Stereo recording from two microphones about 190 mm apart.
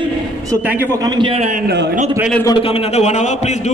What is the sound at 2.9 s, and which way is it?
Speech, 35° left (ahead or behind).